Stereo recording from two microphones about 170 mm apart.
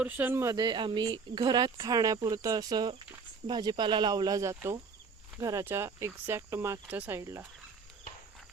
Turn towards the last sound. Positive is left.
turn(degrees=-15)  # may be behind; listen again after turning